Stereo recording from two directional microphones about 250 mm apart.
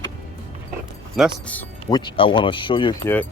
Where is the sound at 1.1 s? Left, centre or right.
Centre.